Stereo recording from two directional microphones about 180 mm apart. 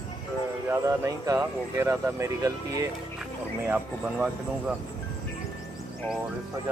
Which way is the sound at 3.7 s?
5° right (ahead or behind).